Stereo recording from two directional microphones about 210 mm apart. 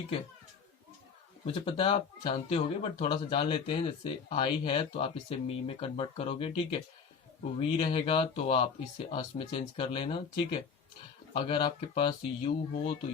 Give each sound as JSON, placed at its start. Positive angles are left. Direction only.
{"t": 1.5, "sound": "speech", "side_deg": 25}
{"t": 7.8, "sound": "speech", "side_deg": 25}